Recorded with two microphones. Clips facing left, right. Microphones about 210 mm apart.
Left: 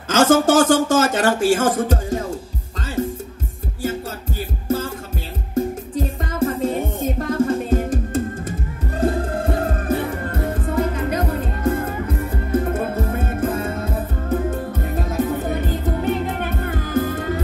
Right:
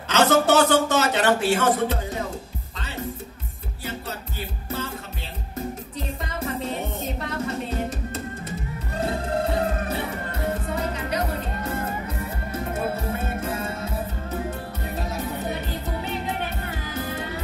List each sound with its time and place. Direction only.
0.1 s speech: 45° left (ahead or behind)
4.6 s music: 45° left (ahead or behind)